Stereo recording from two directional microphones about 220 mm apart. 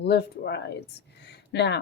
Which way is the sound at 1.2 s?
50° left (ahead or behind).